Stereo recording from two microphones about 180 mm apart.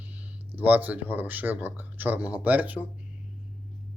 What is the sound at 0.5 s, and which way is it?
Speech, 10° right (ahead or behind).